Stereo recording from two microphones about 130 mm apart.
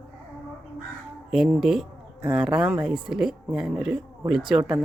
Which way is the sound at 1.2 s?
Centre (ahead or behind).